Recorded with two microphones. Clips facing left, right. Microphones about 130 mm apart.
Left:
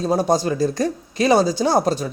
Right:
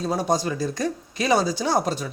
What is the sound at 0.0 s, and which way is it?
Speech, 30° left (ahead or behind).